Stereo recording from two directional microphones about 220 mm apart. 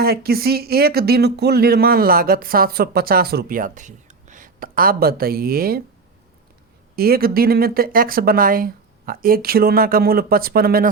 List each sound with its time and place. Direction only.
0.0 s speech: 45° right (ahead or behind)
6.9 s speech: 45° right (ahead or behind)